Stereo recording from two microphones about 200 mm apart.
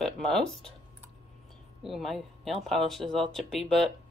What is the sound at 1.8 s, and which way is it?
Speech, centre (ahead or behind).